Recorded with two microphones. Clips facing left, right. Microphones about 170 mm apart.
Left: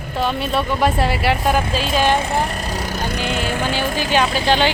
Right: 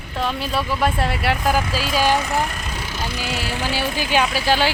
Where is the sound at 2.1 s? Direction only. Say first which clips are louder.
Left 2 dB; 30° left (ahead or behind).